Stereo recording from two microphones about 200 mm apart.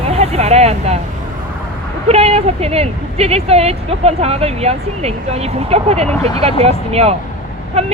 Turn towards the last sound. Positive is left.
turn(degrees=-30)  # may be behind; listen again after turning